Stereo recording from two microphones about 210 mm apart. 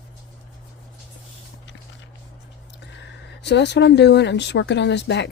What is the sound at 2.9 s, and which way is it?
Speech, 55° left (ahead or behind).